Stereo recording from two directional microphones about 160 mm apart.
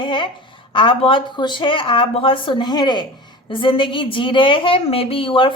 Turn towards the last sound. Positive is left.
turn(degrees=35)  # may be behind; listen again after turning